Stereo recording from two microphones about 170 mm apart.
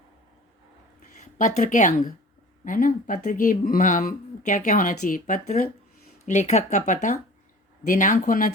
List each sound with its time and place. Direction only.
1.2 s speech: 45° left (ahead or behind)